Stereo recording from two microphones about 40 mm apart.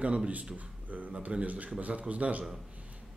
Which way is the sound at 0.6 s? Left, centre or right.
Right.